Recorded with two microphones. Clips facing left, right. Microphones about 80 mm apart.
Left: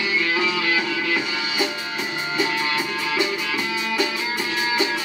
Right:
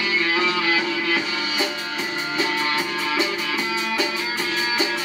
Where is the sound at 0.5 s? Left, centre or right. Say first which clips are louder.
Right 1 dB; centre.